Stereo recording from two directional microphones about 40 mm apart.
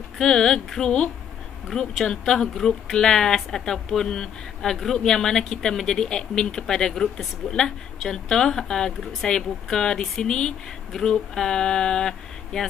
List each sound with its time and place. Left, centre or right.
0.2 s a woman's voice: centre